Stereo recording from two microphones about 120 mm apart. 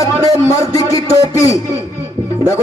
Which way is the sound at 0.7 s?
25° left (ahead or behind).